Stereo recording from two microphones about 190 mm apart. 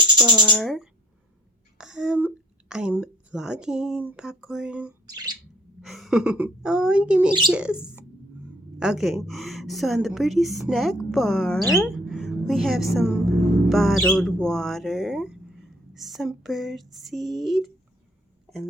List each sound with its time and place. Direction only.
0.4 s a woman's voice: 5° left (ahead or behind)
5.0 s bird: 20° right (ahead or behind)
5.8 s a woman's voice: centre (ahead or behind)